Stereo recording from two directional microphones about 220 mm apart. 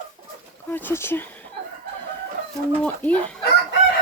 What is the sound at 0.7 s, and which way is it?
Speech, 10° left (ahead or behind).